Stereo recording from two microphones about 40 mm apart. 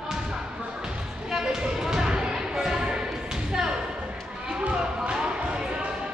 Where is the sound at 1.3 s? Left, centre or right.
Centre.